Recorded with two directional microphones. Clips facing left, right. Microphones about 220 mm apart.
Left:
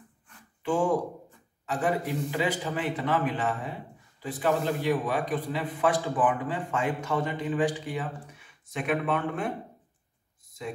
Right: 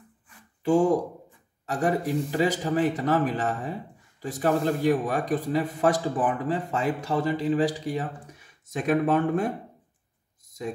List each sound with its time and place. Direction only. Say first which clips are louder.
0.6 s a man's voice: right 5 dB; 40° right (ahead or behind)